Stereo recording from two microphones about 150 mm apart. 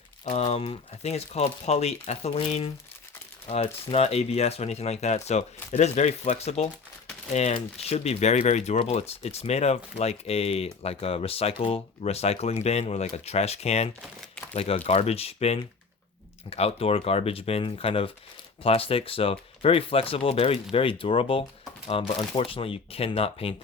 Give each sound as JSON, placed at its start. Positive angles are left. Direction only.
{"t": 0.3, "sound": "speech", "side_deg": 45}